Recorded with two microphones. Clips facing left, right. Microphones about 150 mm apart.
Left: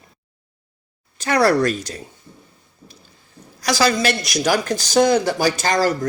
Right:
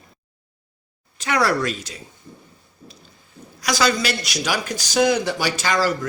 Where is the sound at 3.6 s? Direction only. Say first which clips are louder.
Left 3 dB; 35° left (ahead or behind).